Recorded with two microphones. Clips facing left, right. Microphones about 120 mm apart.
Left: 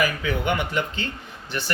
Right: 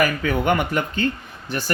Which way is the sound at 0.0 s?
50° right (ahead or behind).